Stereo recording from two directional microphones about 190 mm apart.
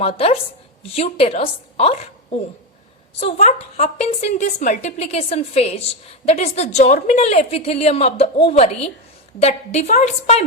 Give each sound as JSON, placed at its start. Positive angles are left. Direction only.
{"t": 0.0, "sound": "a woman's voice", "side_deg": 30}